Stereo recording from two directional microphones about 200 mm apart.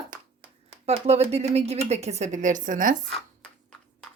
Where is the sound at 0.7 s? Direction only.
30° right (ahead or behind).